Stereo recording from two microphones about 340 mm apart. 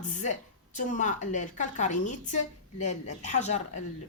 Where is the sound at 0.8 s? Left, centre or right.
Left.